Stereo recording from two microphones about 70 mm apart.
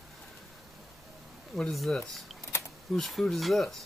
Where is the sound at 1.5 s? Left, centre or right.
Centre.